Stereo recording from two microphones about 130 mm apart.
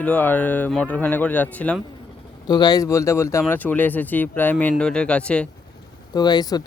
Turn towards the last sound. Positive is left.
turn(degrees=30)  # may be behind; listen again after turning